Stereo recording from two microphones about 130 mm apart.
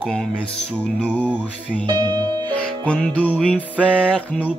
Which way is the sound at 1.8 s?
35° right (ahead or behind).